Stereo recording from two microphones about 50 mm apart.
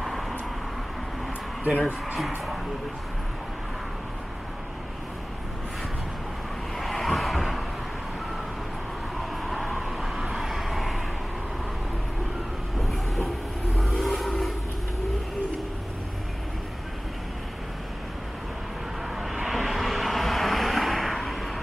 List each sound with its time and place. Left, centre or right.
0.0 s vehicle: centre
1.6 s speech: right
2.1 s speech: centre
6.8 s a sound: centre
9.2 s vehicle: centre
12.8 s train: centre
13.7 s vehicle: centre
19.4 s vehicle: centre